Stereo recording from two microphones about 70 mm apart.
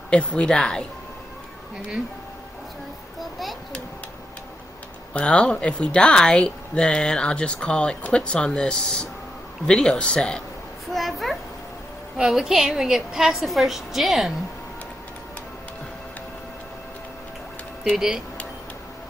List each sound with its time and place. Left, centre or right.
0.1 s a woman's voice: centre
5.1 s a woman's voice: centre
10.9 s a woman's voice: centre
17.8 s speech: centre